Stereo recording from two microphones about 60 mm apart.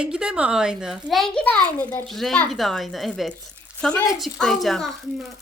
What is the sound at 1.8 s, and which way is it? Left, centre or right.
Speech, left.